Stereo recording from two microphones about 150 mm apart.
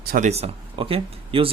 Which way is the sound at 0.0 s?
85° right.